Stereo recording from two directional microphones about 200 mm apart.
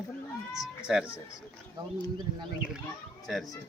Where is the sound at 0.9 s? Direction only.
5° right (ahead or behind).